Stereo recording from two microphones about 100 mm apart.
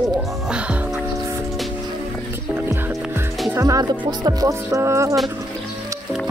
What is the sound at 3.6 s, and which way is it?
Music, 40° right (ahead or behind).